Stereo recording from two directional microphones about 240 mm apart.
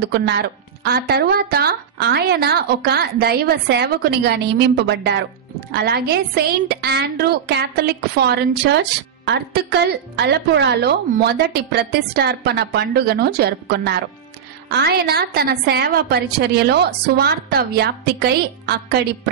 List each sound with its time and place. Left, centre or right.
0.0 s a woman's voice: right